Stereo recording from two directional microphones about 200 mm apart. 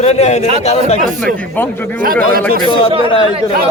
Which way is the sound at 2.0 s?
45° right (ahead or behind).